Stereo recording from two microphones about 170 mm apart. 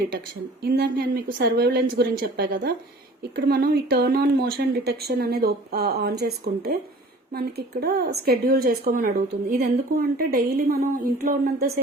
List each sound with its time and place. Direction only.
0.6 s a woman's voice: 65° right (ahead or behind)